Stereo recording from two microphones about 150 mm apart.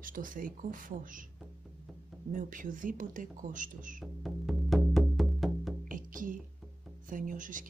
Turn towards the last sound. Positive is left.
turn(degrees=-60)  # may be behind; listen again after turning